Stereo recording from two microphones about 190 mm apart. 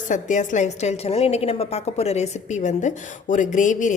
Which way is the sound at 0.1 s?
40° left (ahead or behind).